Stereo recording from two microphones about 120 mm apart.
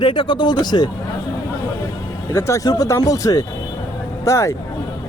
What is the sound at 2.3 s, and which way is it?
Speech, 30° left (ahead or behind).